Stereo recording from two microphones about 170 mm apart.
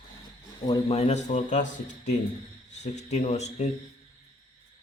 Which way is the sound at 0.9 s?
40° left (ahead or behind).